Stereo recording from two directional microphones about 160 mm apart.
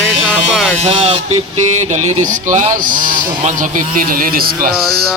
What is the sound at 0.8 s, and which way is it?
Music, 35° right (ahead or behind).